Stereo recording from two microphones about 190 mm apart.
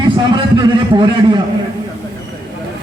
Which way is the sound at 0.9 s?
25° right (ahead or behind).